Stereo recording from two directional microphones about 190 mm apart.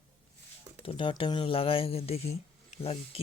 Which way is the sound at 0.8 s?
30° left (ahead or behind).